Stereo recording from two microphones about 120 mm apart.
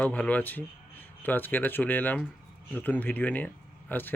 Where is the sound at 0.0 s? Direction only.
10° left (ahead or behind).